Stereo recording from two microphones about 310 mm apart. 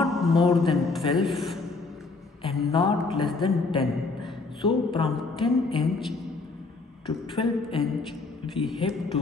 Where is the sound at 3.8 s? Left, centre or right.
Centre.